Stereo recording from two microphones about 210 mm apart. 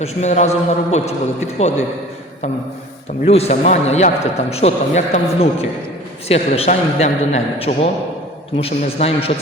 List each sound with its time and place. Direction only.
0.0 s a man's voice: 35° left (ahead or behind)
3.2 s a man's voice: 30° left (ahead or behind)